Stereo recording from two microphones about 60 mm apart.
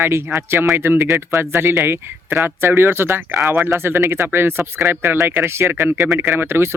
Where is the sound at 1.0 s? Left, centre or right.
Right.